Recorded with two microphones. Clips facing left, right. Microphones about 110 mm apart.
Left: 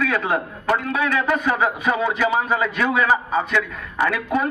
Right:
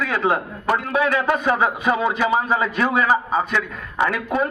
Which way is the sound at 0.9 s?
35° right (ahead or behind).